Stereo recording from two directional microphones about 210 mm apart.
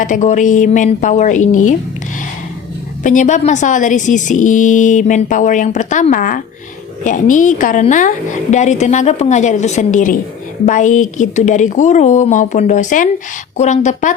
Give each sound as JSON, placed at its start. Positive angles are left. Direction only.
{"t": 0.0, "sound": "a woman's voice", "side_deg": 35}
{"t": 3.0, "sound": "a woman's voice", "side_deg": 35}